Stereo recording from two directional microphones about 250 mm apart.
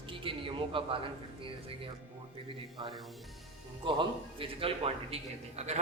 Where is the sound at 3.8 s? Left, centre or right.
Centre.